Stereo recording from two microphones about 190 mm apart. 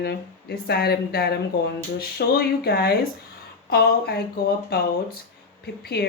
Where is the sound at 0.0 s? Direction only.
55° left (ahead or behind).